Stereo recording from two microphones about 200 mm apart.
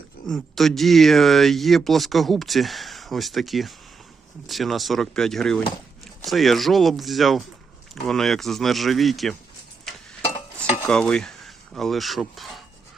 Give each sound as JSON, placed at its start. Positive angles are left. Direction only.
{"t": 0.3, "sound": "speech", "side_deg": 0}
{"t": 10.8, "sound": "speech", "side_deg": 5}